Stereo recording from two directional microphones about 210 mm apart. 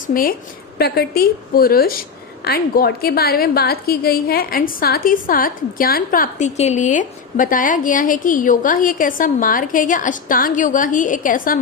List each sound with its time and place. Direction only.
0.1 s a woman's voice: 40° left (ahead or behind)